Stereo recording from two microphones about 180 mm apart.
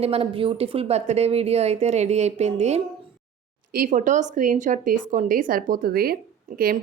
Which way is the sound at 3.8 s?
45° right (ahead or behind).